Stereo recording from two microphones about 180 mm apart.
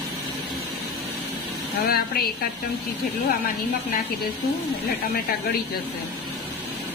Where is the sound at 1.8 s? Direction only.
60° left (ahead or behind).